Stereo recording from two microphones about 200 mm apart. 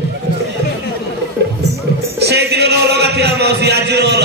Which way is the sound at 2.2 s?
55° right (ahead or behind).